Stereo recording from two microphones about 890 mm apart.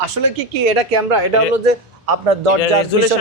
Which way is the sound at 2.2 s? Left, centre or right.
Right.